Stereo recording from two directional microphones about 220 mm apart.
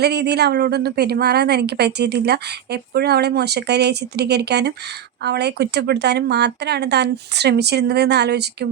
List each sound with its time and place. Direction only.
0.0 s a woman's voice: 50° right (ahead or behind)